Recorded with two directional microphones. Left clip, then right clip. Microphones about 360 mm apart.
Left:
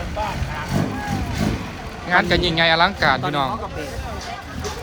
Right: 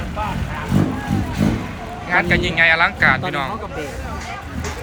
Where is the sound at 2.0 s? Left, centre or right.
Centre.